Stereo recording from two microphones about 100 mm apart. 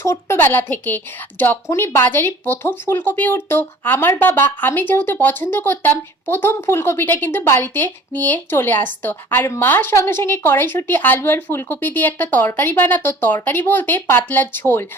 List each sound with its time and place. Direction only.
0.0 s speech: 30° left (ahead or behind)